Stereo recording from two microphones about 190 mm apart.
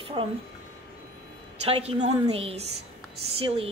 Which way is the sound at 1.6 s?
30° right (ahead or behind).